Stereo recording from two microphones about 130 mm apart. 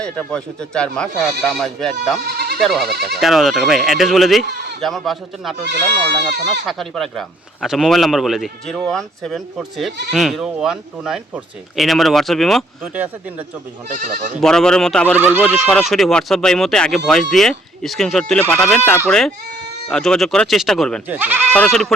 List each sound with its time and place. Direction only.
0.0 s speech: 5° left (ahead or behind)
13.8 s speech: 75° right (ahead or behind)
14.4 s speech: 5° left (ahead or behind)
15.2 s speech: 15° right (ahead or behind)
15.7 s speech: centre (ahead or behind)
18.3 s speech: 10° left (ahead or behind)
21.1 s speech: 15° right (ahead or behind)
21.7 s speech: 5° left (ahead or behind)